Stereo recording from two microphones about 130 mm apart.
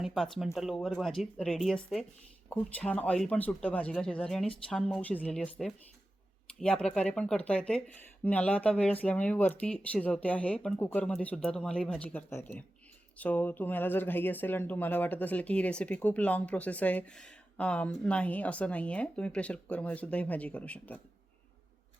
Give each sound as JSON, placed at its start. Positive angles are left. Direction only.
{"t": 0.0, "sound": "speech", "side_deg": 0}
{"t": 10.8, "sound": "speech", "side_deg": 20}